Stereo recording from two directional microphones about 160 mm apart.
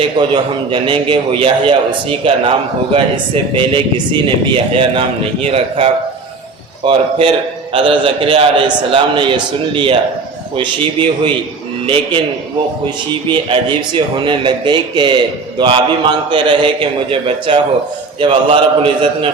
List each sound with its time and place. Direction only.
0.2 s a man's voice: 30° right (ahead or behind)
13.3 s speech: 30° right (ahead or behind)